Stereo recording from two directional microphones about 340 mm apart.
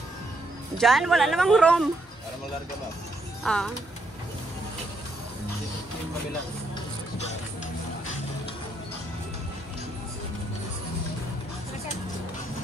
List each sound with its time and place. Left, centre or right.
0.7 s speech: centre
3.4 s speech: centre